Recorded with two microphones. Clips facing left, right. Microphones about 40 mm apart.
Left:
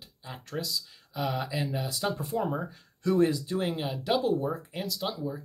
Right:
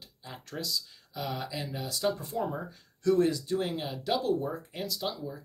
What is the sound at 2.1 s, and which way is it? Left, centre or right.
Speech, centre.